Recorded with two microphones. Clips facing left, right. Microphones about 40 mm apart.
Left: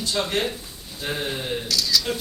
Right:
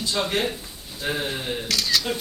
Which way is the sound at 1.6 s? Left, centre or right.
Right.